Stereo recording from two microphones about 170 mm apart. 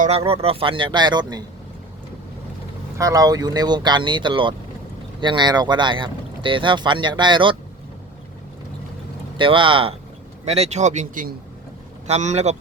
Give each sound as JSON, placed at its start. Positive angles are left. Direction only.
{"t": 0.3, "sound": "speech", "side_deg": -35}
{"t": 3.0, "sound": "speech", "side_deg": -20}
{"t": 9.4, "sound": "speech", "side_deg": -30}
{"t": 12.0, "sound": "speech", "side_deg": -40}